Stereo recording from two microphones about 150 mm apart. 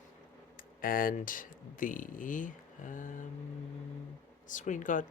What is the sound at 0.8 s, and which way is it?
Speech, 70° left (ahead or behind).